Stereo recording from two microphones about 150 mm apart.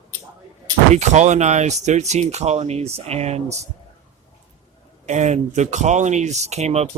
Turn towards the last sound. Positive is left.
turn(degrees=-45)  # may be behind; listen again after turning